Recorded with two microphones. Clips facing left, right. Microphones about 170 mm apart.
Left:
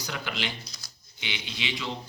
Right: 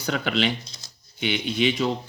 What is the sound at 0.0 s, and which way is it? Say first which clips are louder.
Speech: right 9 dB; 60° right (ahead or behind).